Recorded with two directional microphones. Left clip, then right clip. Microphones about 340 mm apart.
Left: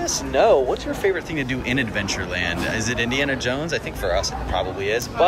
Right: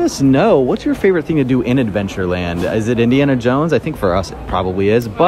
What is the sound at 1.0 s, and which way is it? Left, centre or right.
Speech, centre.